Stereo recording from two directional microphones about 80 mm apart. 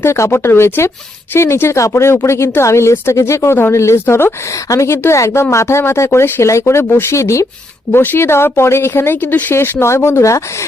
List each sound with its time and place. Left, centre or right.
0.0 s speech: left
7.9 s speech: left